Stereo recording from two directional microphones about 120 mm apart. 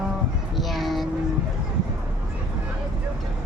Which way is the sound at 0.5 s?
Centre (ahead or behind).